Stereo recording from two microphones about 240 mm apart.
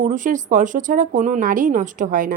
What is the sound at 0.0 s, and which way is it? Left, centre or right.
Speech, right.